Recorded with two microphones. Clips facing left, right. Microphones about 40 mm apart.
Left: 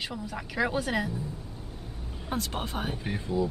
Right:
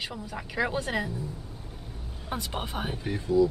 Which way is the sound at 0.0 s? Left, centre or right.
Centre.